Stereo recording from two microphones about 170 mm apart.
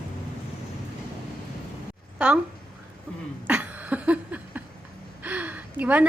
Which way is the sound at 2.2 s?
5° right (ahead or behind).